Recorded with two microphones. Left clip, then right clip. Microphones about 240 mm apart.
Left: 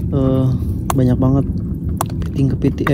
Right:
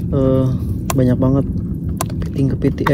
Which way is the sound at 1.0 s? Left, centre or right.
Centre.